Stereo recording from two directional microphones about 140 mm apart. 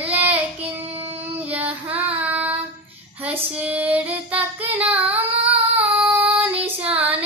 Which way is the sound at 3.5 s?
10° right (ahead or behind).